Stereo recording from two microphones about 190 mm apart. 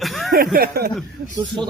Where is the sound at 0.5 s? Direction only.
55° right (ahead or behind).